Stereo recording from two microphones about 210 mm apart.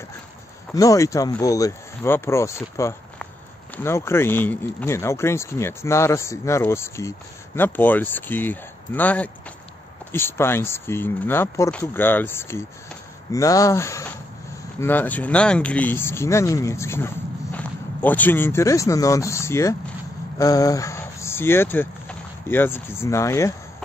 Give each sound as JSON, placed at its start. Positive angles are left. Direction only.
{"t": 0.7, "sound": "speech", "side_deg": 15}